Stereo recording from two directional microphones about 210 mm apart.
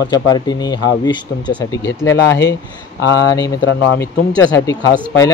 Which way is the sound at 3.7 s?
60° left (ahead or behind).